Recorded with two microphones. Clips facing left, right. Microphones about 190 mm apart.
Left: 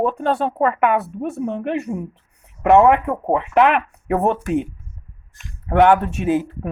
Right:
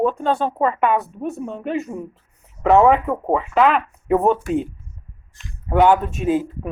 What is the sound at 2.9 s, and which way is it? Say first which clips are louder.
Speech: even; 65° left (ahead or behind).